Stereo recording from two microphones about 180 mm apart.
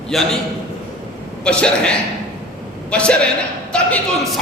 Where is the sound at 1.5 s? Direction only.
5° left (ahead or behind).